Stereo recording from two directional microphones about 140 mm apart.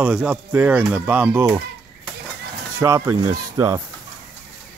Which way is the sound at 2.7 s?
20° right (ahead or behind).